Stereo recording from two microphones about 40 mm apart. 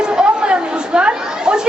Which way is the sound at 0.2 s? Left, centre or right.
Right.